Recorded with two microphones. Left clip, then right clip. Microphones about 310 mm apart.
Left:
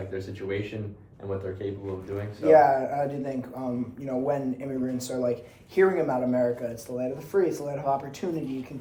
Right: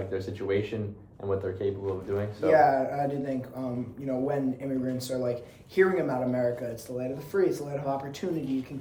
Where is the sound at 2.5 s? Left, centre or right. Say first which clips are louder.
Left 3 dB; centre.